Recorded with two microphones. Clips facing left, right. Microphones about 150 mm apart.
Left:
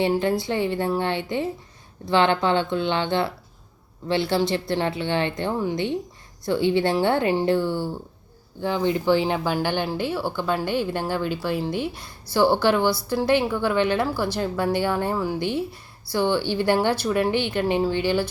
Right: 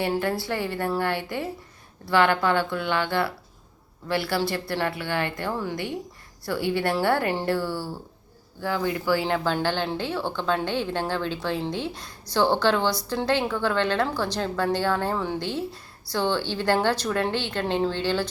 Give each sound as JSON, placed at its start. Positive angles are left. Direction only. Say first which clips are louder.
{"t": 0.0, "sound": "a woman's voice", "louder": "left 4 dB", "side_deg": 20}